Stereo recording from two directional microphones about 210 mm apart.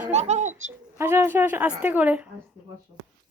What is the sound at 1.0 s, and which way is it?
Speech, 10° right (ahead or behind).